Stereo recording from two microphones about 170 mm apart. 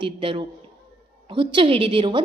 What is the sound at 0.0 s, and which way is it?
A woman's voice, 30° right (ahead or behind).